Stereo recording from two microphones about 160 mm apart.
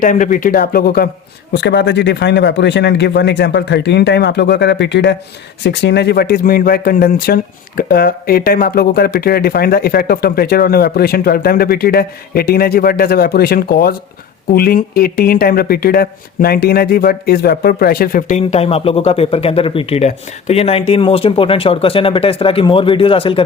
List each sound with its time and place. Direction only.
0.0 s speech: 55° left (ahead or behind); by 1.0 s 70° left (ahead or behind)
1.6 s speech: 90° left; by 23.4 s 35° left (ahead or behind)